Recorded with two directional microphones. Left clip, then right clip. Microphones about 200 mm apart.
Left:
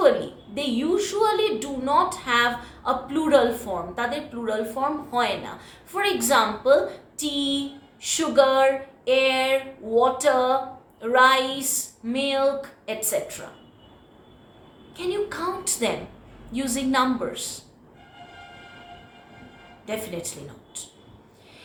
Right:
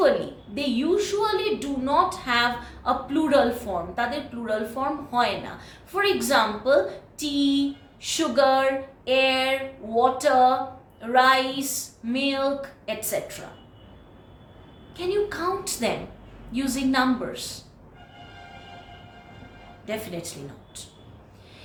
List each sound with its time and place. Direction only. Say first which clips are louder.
0.5 s a woman's voice: even; 15° left (ahead or behind)
14.9 s a woman's voice: right 2 dB; 15° left (ahead or behind)